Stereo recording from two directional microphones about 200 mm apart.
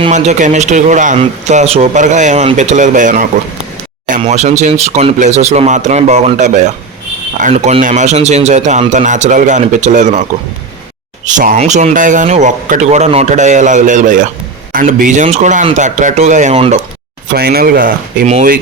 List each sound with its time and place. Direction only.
0.0 s speech: 35° right (ahead or behind)
11.3 s speech: 40° right (ahead or behind)
17.3 s speech: 50° right (ahead or behind)